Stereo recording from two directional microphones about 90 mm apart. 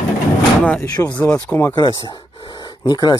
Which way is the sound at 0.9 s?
50° left (ahead or behind).